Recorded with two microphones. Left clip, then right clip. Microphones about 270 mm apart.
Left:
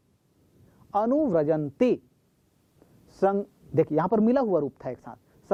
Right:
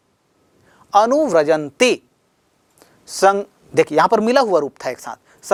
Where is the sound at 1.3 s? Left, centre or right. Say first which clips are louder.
Right 9 dB; centre.